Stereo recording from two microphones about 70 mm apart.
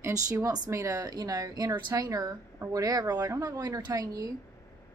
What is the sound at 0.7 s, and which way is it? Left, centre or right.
A woman's voice, right.